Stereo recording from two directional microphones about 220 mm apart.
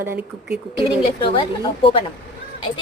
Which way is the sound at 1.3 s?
25° left (ahead or behind).